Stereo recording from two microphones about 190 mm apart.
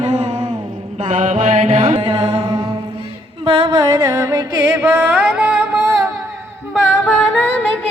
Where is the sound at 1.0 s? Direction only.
40° right (ahead or behind).